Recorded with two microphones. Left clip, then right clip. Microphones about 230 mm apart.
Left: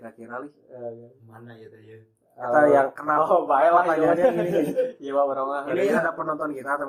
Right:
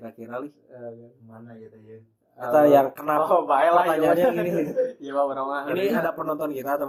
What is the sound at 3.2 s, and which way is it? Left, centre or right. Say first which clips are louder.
Speech: left 1 dB; centre.